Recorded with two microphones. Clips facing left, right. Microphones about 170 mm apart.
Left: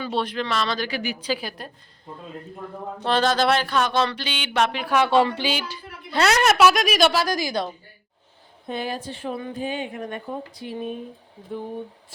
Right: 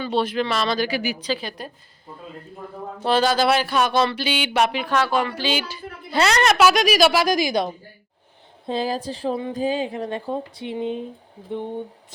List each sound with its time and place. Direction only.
0.0 s speech: centre (ahead or behind)
1.2 s a woman's voice: 10° left (ahead or behind)
3.0 s speech: 5° right (ahead or behind)
4.9 s a woman's voice: 15° left (ahead or behind)
5.1 s speech: 30° left (ahead or behind)
5.5 s a sound: 5° right (ahead or behind)
6.2 s a woman's voice: 5° left (ahead or behind)
7.1 s speech: 15° right (ahead or behind)
8.6 s a sound: 30° right (ahead or behind)
9.6 s speech: 35° right (ahead or behind)